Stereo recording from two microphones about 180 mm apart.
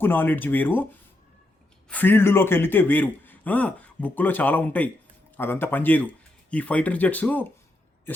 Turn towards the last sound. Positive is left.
turn(degrees=10)  # may be behind; listen again after turning